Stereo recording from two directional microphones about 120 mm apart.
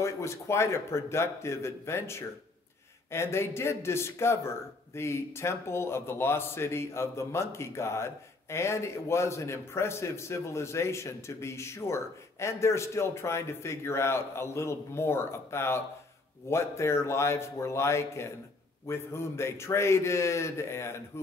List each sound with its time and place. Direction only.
0.0 s a man's voice: 25° left (ahead or behind)